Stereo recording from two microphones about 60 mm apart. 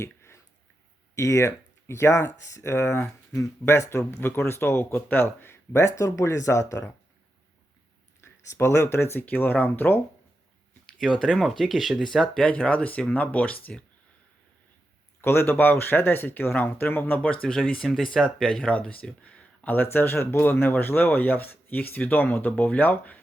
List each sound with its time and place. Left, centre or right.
0.0 s a sound: left
1.1 s speech: left
8.2 s speech: left
11.3 s speech: centre
12.4 s speech: centre
15.2 s speech: left
15.4 s speech: left
17.2 s speech: centre
18.6 s speech: left